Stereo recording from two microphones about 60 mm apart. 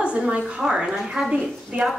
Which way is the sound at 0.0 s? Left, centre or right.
Centre.